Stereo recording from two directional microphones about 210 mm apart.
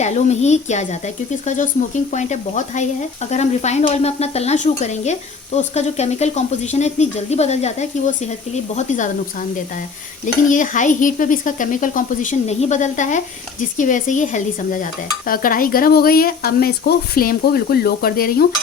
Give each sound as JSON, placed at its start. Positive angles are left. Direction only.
{"t": 0.0, "sound": "speech", "side_deg": 35}